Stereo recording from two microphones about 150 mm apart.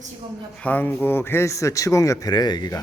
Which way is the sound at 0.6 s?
10° left (ahead or behind).